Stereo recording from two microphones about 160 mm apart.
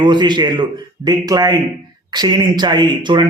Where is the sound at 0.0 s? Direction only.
30° right (ahead or behind).